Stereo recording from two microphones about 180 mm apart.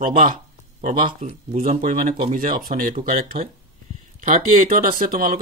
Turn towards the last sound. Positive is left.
turn(degrees=-55)  # may be behind; listen again after turning